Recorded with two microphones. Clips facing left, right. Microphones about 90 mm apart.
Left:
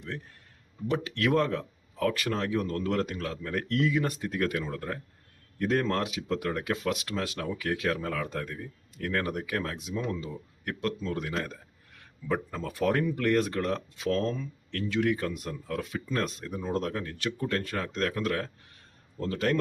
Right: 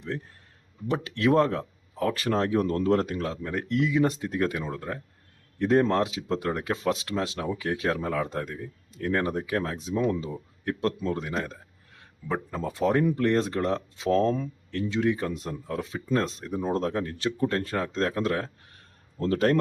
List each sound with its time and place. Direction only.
1.1 s speech: 30° right (ahead or behind)
16.6 s speech: 35° right (ahead or behind)
19.2 s speech: 40° right (ahead or behind)